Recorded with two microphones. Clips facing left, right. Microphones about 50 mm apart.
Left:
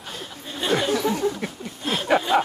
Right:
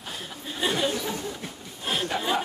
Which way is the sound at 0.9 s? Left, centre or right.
Left.